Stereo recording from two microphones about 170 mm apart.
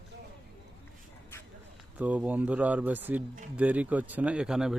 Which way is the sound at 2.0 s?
10° right (ahead or behind).